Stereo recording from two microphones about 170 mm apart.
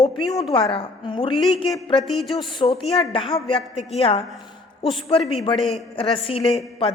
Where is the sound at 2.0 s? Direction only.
Centre (ahead or behind).